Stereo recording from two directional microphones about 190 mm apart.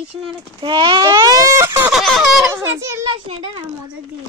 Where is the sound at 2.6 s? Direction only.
15° right (ahead or behind).